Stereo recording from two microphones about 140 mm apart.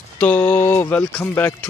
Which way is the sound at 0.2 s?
10° left (ahead or behind).